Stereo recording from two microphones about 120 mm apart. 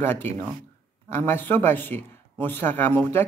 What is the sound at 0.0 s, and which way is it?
Speech, 15° left (ahead or behind).